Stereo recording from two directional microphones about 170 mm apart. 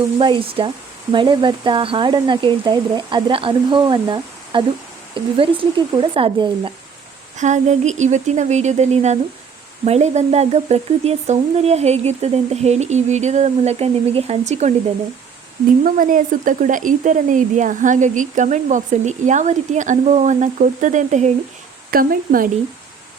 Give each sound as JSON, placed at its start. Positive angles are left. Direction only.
{"t": 0.2, "sound": "speech", "side_deg": -30}
{"t": 7.3, "sound": "speech", "side_deg": -45}
{"t": 15.8, "sound": "speech", "side_deg": -50}
{"t": 21.8, "sound": "a woman's voice", "side_deg": -55}